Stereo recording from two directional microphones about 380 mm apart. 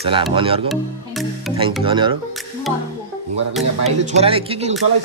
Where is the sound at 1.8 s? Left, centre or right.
Centre.